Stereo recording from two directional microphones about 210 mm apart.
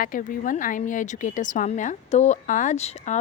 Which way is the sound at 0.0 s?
40° left (ahead or behind).